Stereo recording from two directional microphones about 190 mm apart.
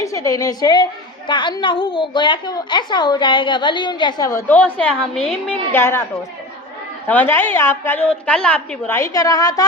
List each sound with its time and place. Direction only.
0.0 s a woman's voice: 15° left (ahead or behind)
7.1 s a woman's voice: 10° left (ahead or behind)